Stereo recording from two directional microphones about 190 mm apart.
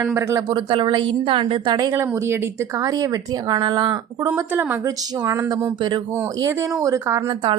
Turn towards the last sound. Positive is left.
turn(degrees=-25)  # may be behind; listen again after turning